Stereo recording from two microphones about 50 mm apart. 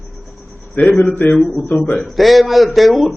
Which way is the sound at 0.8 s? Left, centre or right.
Left.